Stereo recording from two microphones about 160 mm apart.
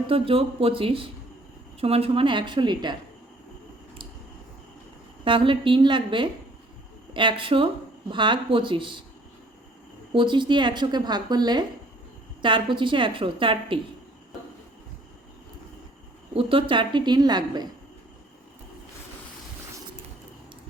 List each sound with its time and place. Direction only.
0.1 s a woman's voice: 35° right (ahead or behind)
5.2 s a woman's voice: 30° right (ahead or behind)
10.1 s a woman's voice: 30° right (ahead or behind)
16.3 s speech: 35° right (ahead or behind)